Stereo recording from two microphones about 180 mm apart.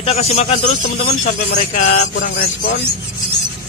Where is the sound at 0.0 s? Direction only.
35° left (ahead or behind).